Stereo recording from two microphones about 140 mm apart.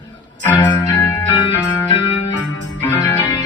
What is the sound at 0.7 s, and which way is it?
Music, 15° left (ahead or behind).